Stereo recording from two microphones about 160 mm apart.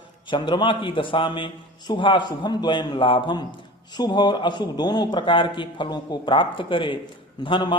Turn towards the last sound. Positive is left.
turn(degrees=30)  # may be behind; listen again after turning